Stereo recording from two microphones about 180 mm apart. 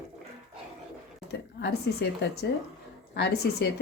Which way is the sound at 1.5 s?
65° left (ahead or behind).